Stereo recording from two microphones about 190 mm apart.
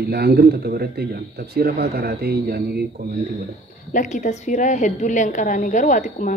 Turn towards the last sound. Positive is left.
turn(degrees=45)  # may be behind; listen again after turning